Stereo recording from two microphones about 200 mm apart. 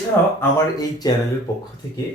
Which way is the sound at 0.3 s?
20° left (ahead or behind).